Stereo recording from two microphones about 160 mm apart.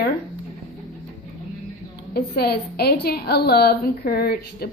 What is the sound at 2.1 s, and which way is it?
A woman's voice, 75° left (ahead or behind).